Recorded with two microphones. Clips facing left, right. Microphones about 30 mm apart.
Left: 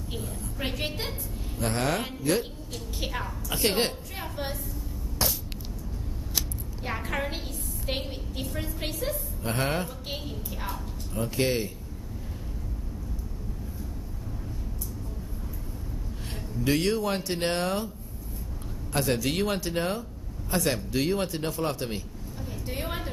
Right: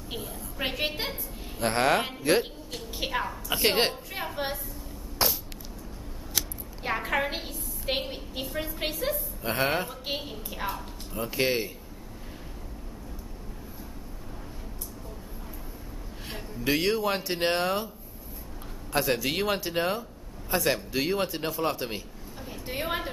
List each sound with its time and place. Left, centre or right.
0.1 s a woman's voice: centre
1.6 s speech: right
2.7 s a woman's voice: centre
5.2 s a sound: centre
6.8 s a woman's voice: centre
16.3 s speech: centre
18.9 s a woman's voice: centre
22.5 s a sound: centre